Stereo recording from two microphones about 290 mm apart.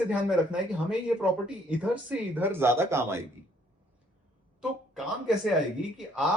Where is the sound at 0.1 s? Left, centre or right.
Centre.